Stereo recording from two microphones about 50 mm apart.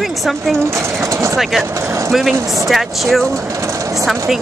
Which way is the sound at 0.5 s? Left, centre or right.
Right.